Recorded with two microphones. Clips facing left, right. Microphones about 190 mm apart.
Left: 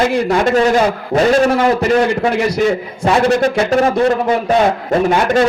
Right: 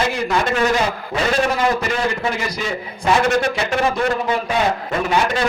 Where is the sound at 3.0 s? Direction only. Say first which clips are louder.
Left 4 dB; 40° left (ahead or behind).